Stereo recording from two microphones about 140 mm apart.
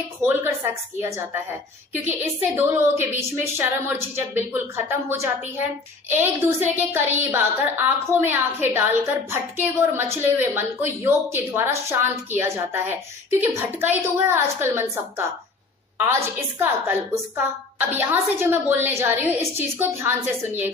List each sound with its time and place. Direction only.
0.2 s a woman's voice: 15° right (ahead or behind)